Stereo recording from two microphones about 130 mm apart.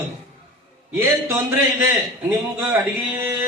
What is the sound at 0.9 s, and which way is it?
Speech, 20° right (ahead or behind).